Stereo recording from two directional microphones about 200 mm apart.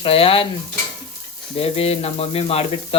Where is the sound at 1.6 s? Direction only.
30° left (ahead or behind).